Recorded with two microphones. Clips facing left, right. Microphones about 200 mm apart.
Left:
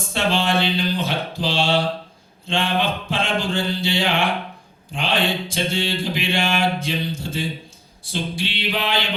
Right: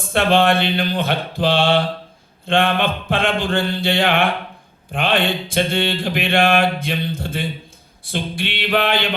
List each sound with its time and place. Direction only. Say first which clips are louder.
0.1 s mantra: right 6 dB; 60° right (ahead or behind)